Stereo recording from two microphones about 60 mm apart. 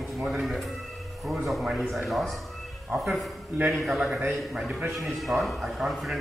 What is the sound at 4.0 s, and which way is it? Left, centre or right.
Speech, right.